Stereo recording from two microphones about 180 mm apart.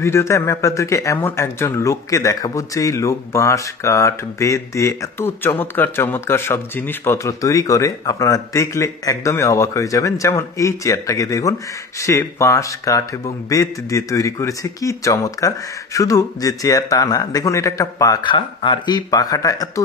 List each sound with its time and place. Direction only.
0.0 s speech: 15° left (ahead or behind)